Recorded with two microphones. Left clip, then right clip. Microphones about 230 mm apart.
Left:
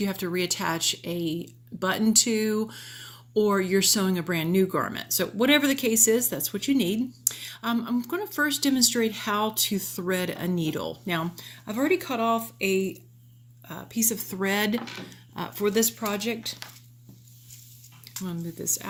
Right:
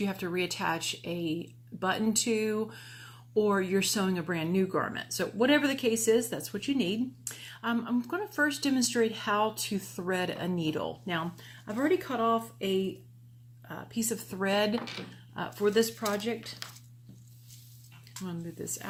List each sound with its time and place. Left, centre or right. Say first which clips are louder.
0.0 s speech: left 4 dB; left
18.3 s speech: left 7 dB; left